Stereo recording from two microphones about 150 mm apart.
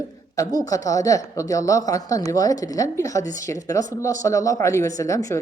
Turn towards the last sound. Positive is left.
turn(degrees=20)  # may be behind; listen again after turning